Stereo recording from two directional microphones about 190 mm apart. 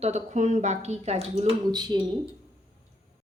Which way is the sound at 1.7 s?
20° right (ahead or behind).